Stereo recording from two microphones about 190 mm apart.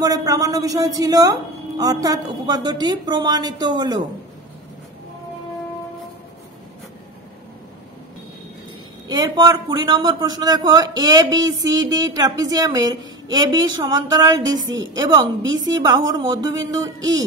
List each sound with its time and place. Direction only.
0.0 s a man's voice: 20° right (ahead or behind)
9.1 s a man's voice: 20° right (ahead or behind)